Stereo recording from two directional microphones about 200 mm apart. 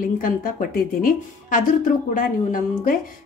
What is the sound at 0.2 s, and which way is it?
A woman's voice, 45° left (ahead or behind).